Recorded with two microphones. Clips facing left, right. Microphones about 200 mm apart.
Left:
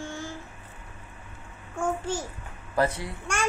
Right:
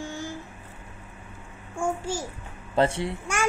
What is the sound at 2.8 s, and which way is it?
Speech, 25° right (ahead or behind).